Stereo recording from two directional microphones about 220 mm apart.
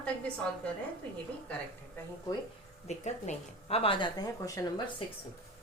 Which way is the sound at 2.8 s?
30° left (ahead or behind).